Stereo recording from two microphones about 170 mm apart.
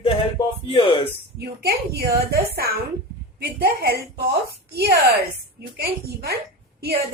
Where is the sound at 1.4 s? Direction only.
70° right (ahead or behind).